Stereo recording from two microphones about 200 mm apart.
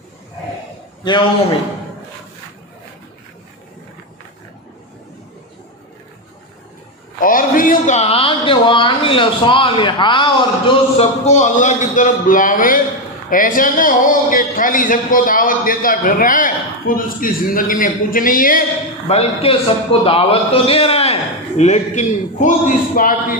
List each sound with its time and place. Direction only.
1.0 s a man's voice: 25° left (ahead or behind)
7.2 s a man's voice: 45° left (ahead or behind)
19.0 s a man's voice: 30° left (ahead or behind)